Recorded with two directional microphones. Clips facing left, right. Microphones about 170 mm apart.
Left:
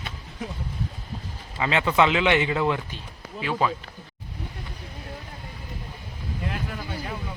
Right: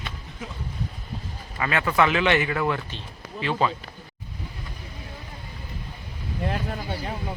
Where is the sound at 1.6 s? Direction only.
20° left (ahead or behind).